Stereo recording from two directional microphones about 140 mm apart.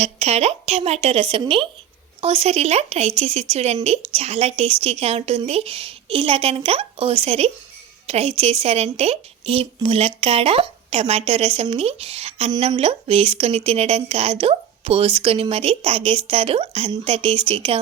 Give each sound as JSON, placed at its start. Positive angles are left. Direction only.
{"t": 0.0, "sound": "a woman's voice", "side_deg": -50}